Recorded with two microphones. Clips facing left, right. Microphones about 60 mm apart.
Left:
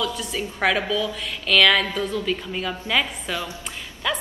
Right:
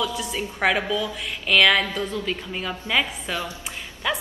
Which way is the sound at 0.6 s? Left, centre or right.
Centre.